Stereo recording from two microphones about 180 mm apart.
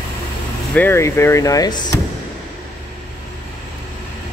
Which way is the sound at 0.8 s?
15° left (ahead or behind).